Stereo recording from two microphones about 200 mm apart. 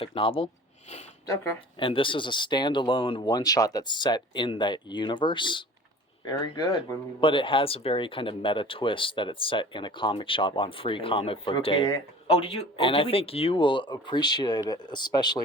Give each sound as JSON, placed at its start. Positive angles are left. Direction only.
{"t": 0.0, "sound": "speech", "side_deg": 25}
{"t": 1.8, "sound": "speech", "side_deg": 25}